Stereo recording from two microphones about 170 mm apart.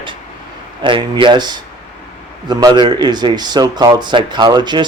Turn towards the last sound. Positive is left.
turn(degrees=-25)  # may be behind; listen again after turning